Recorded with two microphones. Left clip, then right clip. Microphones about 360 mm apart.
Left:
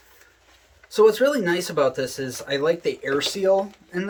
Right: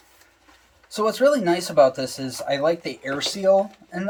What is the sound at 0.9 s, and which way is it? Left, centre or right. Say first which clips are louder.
Speech: left 2 dB; centre.